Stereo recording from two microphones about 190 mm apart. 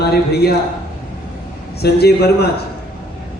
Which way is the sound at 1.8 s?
55° left (ahead or behind).